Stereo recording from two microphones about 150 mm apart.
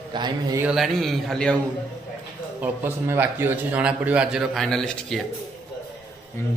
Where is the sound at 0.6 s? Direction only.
5° right (ahead or behind).